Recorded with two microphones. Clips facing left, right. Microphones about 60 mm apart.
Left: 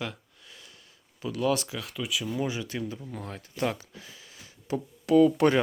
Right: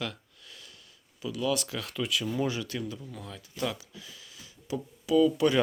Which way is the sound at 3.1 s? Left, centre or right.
Left.